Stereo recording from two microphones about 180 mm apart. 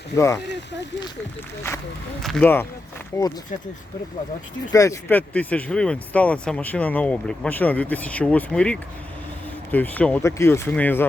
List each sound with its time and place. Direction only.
0.1 s speech: 70° left (ahead or behind)
2.2 s speech: 5° left (ahead or behind)
4.7 s speech: 15° left (ahead or behind)